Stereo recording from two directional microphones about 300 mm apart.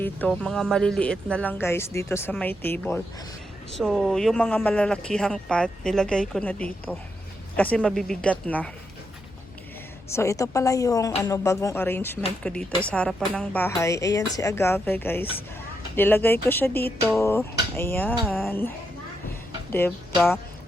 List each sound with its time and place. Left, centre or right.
0.0 s speech: centre
10.1 s a woman's voice: centre
19.7 s a woman's voice: centre